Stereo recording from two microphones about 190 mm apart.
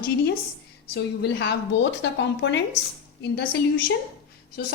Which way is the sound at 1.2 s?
65° left (ahead or behind).